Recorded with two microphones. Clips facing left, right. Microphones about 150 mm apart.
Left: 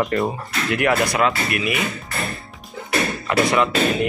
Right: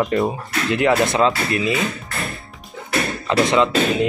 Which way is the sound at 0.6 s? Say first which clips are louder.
Right 2 dB; 20° right (ahead or behind).